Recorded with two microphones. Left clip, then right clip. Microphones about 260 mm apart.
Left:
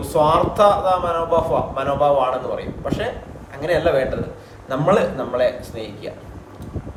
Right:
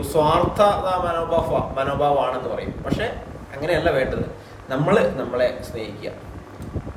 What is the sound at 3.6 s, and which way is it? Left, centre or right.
A man's voice, centre.